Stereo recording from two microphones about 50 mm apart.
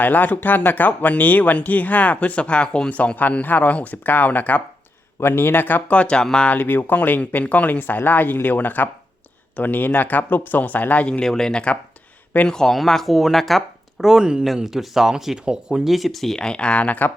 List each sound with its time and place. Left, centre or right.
0.0 s speech: left; by 2.9 s centre
3.2 s speech: left
5.2 s speech: left
5.9 s speech: left
6.5 s speech: left
11.2 s speech: centre
15.9 s speech: centre
16.4 s speech: centre